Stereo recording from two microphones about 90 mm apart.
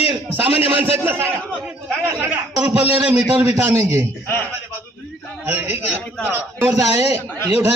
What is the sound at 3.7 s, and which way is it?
Speech, 30° right (ahead or behind).